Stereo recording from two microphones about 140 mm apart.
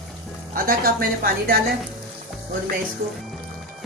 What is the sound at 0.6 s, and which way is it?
Speech, 90° right.